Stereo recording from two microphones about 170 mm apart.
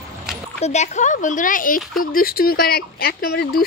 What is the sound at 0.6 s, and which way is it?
Speech, 40° left (ahead or behind).